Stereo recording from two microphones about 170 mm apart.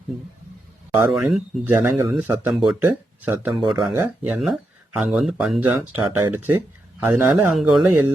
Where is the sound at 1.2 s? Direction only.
Centre (ahead or behind).